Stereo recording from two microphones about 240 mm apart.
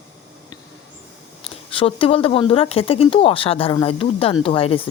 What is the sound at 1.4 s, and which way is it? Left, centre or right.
Speech, left.